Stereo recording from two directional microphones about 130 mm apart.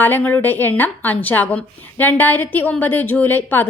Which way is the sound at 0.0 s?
15° left (ahead or behind).